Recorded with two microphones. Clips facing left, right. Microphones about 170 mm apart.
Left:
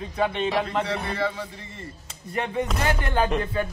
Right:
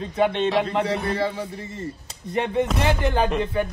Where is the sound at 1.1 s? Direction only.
35° right (ahead or behind).